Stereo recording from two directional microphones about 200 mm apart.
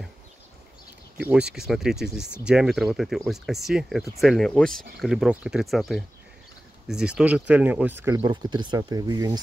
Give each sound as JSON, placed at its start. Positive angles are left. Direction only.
{"t": 1.1, "sound": "speech", "side_deg": -5}
{"t": 8.2, "sound": "speech", "side_deg": -20}